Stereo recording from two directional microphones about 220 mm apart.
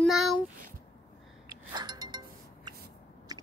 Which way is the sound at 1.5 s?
20° right (ahead or behind).